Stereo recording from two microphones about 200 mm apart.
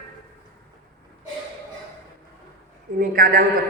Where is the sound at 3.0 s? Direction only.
45° right (ahead or behind).